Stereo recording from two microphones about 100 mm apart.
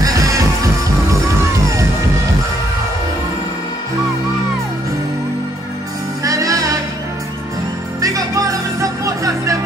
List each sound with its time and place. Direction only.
0.0 s music: 35° right (ahead or behind)
6.2 s music: 35° right (ahead or behind)
8.0 s music: 35° right (ahead or behind)